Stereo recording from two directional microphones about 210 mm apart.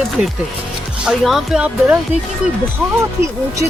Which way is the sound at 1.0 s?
5° right (ahead or behind).